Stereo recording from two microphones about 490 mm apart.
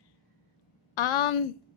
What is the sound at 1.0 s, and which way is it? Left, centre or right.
Speech, left.